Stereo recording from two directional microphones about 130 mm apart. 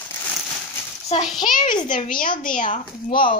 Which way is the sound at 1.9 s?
90° left.